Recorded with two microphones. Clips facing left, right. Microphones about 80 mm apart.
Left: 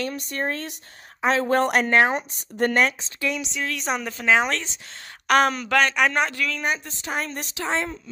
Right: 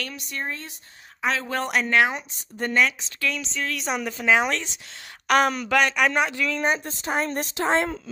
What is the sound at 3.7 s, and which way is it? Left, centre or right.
A woman's voice, centre.